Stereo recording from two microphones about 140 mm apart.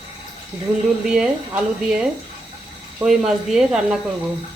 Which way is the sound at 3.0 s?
5° right (ahead or behind).